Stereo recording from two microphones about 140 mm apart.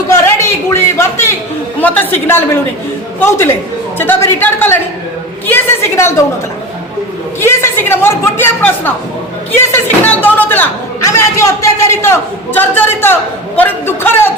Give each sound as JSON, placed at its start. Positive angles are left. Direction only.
{"t": 0.1, "sound": "a sound", "side_deg": 20}
{"t": 1.8, "sound": "speech", "side_deg": 10}
{"t": 7.4, "sound": "speech", "side_deg": 15}